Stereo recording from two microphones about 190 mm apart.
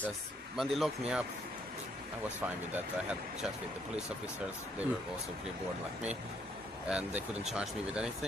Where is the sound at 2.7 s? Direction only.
5° right (ahead or behind).